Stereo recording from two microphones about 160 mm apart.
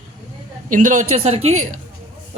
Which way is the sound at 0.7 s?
55° right (ahead or behind).